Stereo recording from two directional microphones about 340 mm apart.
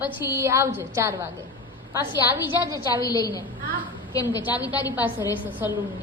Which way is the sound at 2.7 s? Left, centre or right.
Centre.